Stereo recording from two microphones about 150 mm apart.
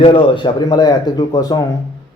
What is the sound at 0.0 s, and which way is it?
A man's voice, 35° left (ahead or behind).